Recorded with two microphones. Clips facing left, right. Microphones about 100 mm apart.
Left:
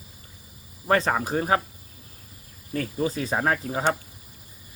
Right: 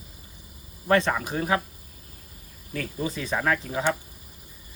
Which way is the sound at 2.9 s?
35° left (ahead or behind).